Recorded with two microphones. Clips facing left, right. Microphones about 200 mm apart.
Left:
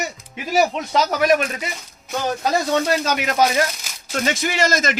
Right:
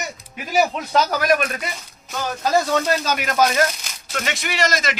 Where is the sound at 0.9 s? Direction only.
25° left (ahead or behind).